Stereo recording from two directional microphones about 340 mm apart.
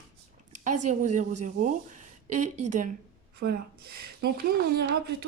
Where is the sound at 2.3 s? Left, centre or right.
Right.